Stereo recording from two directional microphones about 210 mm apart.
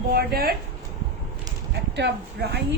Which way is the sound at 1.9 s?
50° right (ahead or behind).